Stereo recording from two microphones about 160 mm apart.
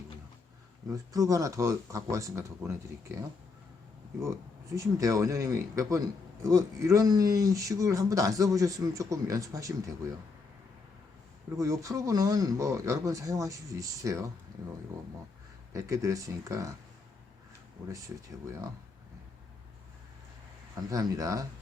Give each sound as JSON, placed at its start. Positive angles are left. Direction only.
{"t": 0.9, "sound": "speech", "side_deg": -20}
{"t": 11.5, "sound": "speech", "side_deg": -20}
{"t": 15.7, "sound": "speech", "side_deg": -20}
{"t": 20.9, "sound": "speech", "side_deg": -20}